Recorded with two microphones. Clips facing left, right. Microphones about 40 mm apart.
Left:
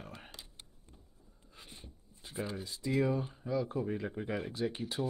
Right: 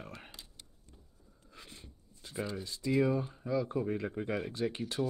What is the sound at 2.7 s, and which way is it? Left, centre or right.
Speech, left.